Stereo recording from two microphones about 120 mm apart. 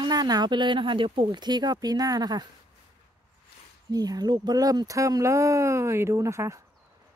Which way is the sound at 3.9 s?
35° right (ahead or behind).